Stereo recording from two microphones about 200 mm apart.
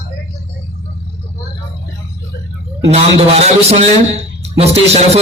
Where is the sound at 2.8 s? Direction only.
30° right (ahead or behind).